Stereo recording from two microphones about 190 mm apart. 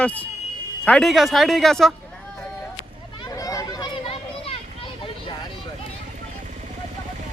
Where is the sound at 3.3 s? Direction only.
20° left (ahead or behind).